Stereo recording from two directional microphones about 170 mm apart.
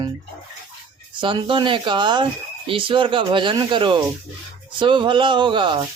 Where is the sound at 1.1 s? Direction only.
30° right (ahead or behind).